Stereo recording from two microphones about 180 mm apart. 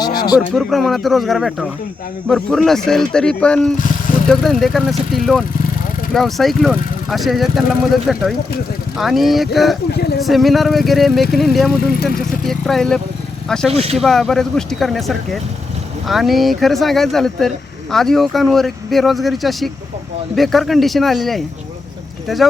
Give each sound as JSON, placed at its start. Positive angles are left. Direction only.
{"t": 0.0, "sound": "a sound", "side_deg": 20}
{"t": 0.3, "sound": "speech", "side_deg": 0}
{"t": 9.9, "sound": "speech", "side_deg": 65}
{"t": 10.2, "sound": "speech", "side_deg": 0}